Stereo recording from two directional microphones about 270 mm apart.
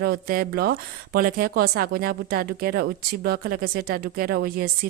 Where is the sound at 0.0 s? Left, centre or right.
Right.